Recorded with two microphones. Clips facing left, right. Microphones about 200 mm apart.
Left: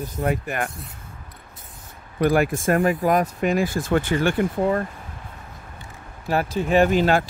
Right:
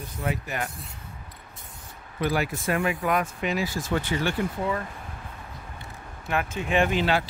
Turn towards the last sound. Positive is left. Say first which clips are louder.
# left 6 dB
turn(degrees=45)  # may be behind; listen again after turning